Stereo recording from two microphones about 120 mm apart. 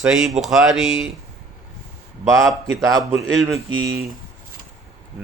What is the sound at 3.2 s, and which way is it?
Speech, centre (ahead or behind).